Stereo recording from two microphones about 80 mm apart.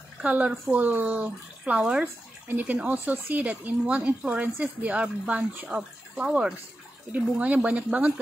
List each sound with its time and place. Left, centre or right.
0.2 s speech: centre
2.4 s speech: right